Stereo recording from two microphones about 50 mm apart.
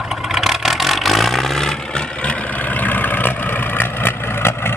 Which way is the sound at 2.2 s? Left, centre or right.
Left.